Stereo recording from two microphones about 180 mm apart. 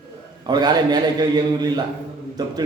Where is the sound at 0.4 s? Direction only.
25° right (ahead or behind).